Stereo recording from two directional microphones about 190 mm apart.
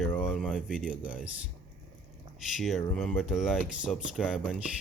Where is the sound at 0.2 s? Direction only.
Centre (ahead or behind).